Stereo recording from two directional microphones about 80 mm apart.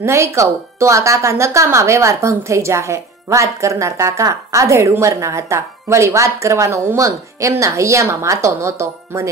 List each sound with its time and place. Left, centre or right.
0.0 s speech: right